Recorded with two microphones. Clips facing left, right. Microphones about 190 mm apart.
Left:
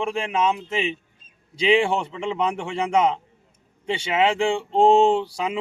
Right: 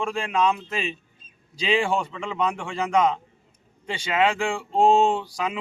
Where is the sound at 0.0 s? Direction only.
20° left (ahead or behind).